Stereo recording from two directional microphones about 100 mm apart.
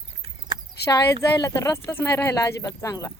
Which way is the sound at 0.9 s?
40° left (ahead or behind).